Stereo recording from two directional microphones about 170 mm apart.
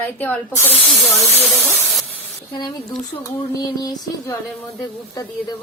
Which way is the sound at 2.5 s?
25° left (ahead or behind).